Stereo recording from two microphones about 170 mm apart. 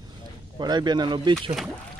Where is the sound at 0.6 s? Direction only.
25° right (ahead or behind).